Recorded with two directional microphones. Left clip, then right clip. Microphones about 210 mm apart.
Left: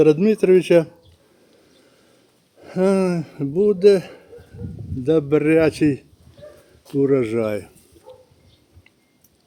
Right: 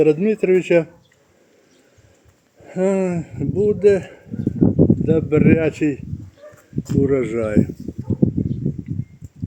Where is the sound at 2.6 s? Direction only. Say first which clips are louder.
Left 1 dB; 15° left (ahead or behind).